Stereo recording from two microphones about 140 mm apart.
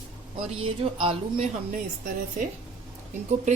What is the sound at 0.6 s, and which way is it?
Speech, 40° right (ahead or behind).